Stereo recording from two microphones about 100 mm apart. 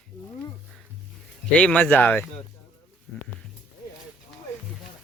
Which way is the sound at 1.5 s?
10° left (ahead or behind).